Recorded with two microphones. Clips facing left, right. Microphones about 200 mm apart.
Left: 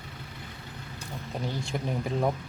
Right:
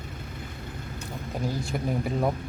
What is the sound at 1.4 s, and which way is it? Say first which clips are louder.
Speech: right 3 dB; 5° right (ahead or behind).